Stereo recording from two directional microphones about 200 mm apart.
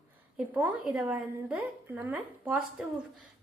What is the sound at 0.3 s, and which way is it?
A woman's voice, 10° right (ahead or behind).